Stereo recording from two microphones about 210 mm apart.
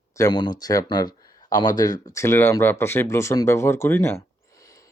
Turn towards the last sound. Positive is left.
turn(degrees=15)  # may be behind; listen again after turning